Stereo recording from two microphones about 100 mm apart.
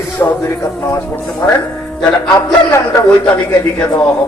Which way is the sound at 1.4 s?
25° left (ahead or behind).